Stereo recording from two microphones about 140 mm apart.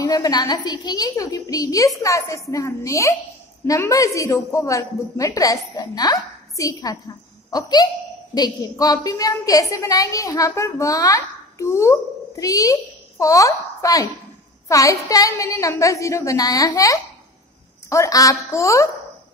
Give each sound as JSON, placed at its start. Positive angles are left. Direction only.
{"t": 0.0, "sound": "a woman's voice", "side_deg": 25}